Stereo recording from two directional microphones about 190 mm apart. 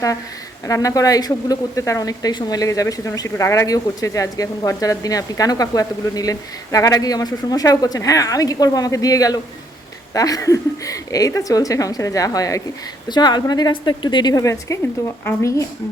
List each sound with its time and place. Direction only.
0.6 s a woman's voice: 15° left (ahead or behind)